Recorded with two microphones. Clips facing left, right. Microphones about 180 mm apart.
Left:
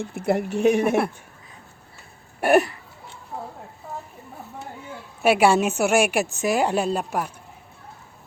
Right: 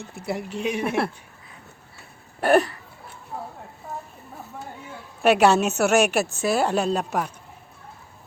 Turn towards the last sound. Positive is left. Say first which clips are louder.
# even
turn(degrees=10)  # may be behind; listen again after turning